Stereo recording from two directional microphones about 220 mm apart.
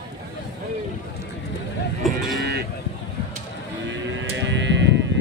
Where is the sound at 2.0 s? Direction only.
Centre (ahead or behind).